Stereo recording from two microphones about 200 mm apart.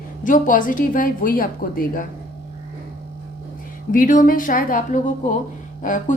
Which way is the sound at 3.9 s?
45° left (ahead or behind).